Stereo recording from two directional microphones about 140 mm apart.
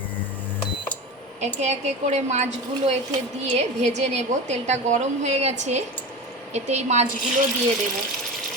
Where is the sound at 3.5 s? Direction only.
55° right (ahead or behind).